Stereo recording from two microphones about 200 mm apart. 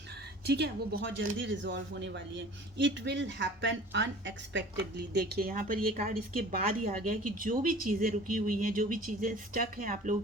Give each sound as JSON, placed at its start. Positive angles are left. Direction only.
{"t": 0.4, "sound": "speech", "side_deg": -55}
{"t": 1.4, "sound": "speech", "side_deg": -65}
{"t": 5.1, "sound": "a woman's voice", "side_deg": -55}